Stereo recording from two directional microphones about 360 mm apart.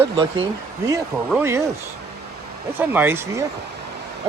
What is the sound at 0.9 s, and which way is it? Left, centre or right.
Speech, centre.